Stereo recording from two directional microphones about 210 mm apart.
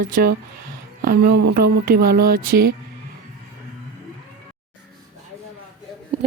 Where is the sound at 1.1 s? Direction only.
50° right (ahead or behind).